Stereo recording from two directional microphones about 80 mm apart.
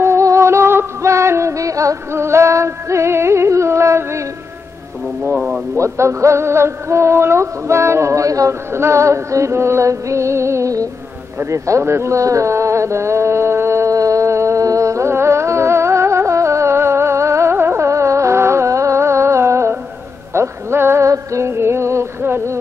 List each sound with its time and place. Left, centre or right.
0.0 s music: right
5.8 s music: right
11.3 s a sound: right
20.3 s music: right